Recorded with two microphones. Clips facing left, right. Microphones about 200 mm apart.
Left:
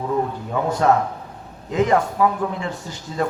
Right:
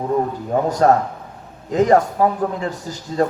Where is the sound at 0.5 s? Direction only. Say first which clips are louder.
Right 3 dB; 40° right (ahead or behind).